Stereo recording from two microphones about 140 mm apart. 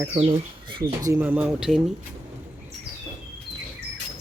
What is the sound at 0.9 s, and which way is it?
Speech, 25° right (ahead or behind).